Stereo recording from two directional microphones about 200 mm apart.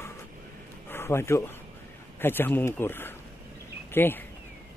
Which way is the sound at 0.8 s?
10° left (ahead or behind).